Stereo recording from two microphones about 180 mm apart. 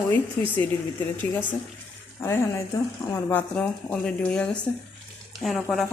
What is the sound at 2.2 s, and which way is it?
A woman's voice, 15° left (ahead or behind).